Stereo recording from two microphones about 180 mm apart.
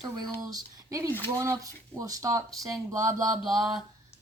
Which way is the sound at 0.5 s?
20° right (ahead or behind).